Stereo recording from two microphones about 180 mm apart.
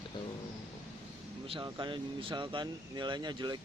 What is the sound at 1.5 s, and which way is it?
Speech, 25° right (ahead or behind).